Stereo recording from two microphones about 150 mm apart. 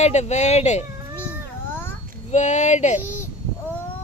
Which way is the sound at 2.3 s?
50° left (ahead or behind).